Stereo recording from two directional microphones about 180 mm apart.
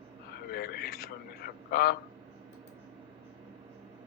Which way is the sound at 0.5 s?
55° left (ahead or behind).